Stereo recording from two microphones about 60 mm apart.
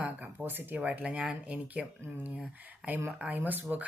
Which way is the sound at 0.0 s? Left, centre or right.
Right.